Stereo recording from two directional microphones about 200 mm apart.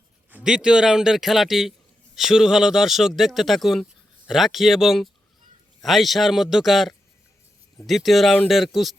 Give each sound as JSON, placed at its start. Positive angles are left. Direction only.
{"t": 0.3, "sound": "speech", "side_deg": -5}